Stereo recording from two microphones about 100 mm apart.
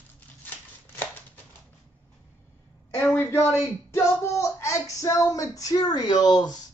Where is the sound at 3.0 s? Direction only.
25° left (ahead or behind); by 6.5 s 45° left (ahead or behind).